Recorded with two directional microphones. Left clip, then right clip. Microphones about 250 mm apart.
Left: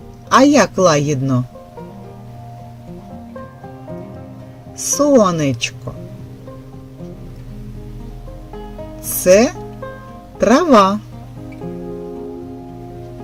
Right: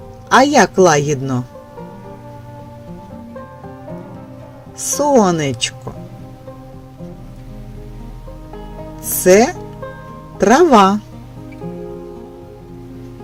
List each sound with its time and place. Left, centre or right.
0.3 s speech: centre
4.9 s speech: centre
9.2 s speech: right